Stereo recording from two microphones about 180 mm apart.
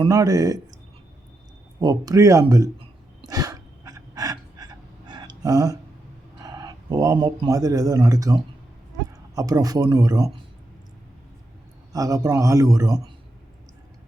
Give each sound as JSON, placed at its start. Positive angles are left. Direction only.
{"t": 0.0, "sound": "speech", "side_deg": -20}
{"t": 1.8, "sound": "speech", "side_deg": -20}
{"t": 2.7, "sound": "a sound", "side_deg": -25}
{"t": 6.4, "sound": "a man's voice", "side_deg": -20}
{"t": 11.9, "sound": "a man's voice", "side_deg": -20}